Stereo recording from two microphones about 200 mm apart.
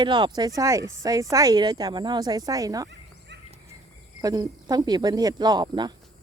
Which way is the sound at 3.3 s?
60° right (ahead or behind).